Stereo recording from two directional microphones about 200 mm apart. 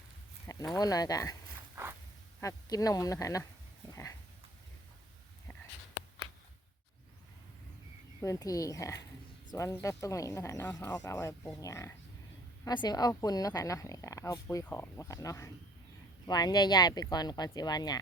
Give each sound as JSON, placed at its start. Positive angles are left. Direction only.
{"t": 0.8, "sound": "a woman's voice", "side_deg": 20}
{"t": 1.7, "sound": "a sound", "side_deg": -10}
{"t": 2.4, "sound": "a woman's voice", "side_deg": 15}
{"t": 8.2, "sound": "a woman's voice", "side_deg": 15}